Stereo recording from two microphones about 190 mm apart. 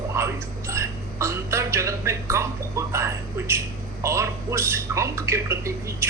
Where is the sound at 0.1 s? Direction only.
15° right (ahead or behind).